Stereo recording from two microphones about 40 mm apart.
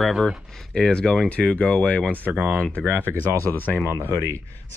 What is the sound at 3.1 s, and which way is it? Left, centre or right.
Speech, left.